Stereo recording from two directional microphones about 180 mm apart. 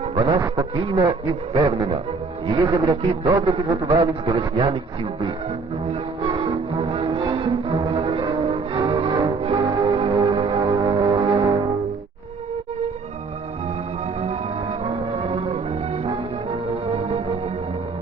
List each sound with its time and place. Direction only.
0.2 s a man's voice: 25° right (ahead or behind)
6.4 s music: 30° right (ahead or behind)
14.2 s music: 35° right (ahead or behind)
16.9 s music: 35° right (ahead or behind)